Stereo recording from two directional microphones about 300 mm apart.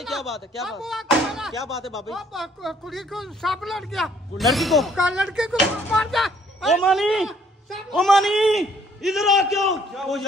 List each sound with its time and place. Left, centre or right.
0.0 s speech: centre